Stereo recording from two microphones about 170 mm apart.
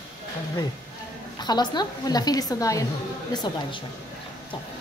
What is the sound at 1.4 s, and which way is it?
A woman's voice, 25° left (ahead or behind).